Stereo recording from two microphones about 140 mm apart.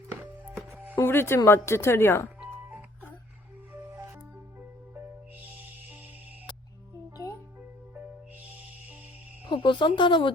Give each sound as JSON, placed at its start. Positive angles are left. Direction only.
{"t": 0.9, "sound": "a woman's voice", "side_deg": 15}
{"t": 2.5, "sound": "music", "side_deg": -10}
{"t": 9.5, "sound": "speech", "side_deg": 35}